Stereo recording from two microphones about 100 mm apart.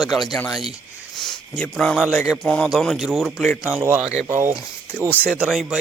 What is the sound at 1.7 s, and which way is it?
Speech, 5° left (ahead or behind).